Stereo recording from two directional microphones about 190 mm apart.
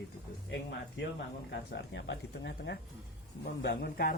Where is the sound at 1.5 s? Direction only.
65° left (ahead or behind).